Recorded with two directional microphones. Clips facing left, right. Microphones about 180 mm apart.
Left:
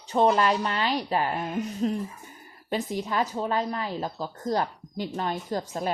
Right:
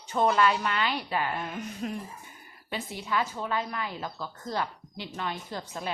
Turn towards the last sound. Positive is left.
turn(degrees=40)  # may be behind; listen again after turning